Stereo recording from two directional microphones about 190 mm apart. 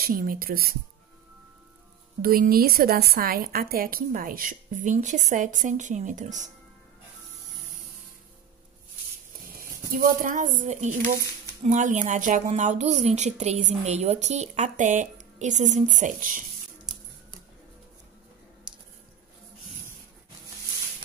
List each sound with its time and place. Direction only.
0.0 s a woman's voice: 50° right (ahead or behind)
2.2 s a woman's voice: 50° right (ahead or behind)
9.6 s a woman's voice: 50° right (ahead or behind)